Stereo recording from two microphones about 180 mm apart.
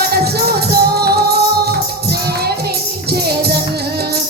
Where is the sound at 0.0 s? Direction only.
60° right (ahead or behind).